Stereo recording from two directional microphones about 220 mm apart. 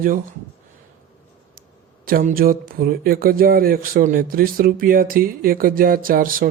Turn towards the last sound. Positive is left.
turn(degrees=-40)  # may be behind; listen again after turning